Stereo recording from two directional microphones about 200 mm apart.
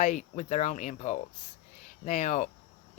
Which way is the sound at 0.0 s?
35° left (ahead or behind).